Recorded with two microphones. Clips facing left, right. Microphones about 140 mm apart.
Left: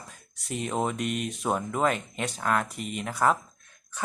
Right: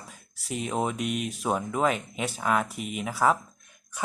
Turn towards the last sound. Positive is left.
turn(degrees=-5)  # may be behind; listen again after turning